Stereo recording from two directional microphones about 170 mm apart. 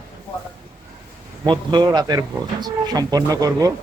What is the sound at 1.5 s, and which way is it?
Speech, 25° right (ahead or behind).